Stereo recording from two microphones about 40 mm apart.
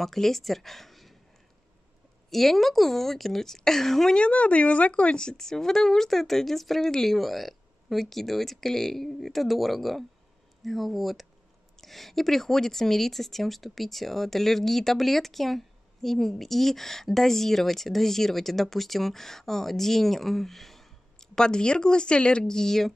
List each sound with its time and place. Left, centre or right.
0.0 s speech: centre
2.3 s speech: centre
4.2 s speech: left
5.2 s speech: centre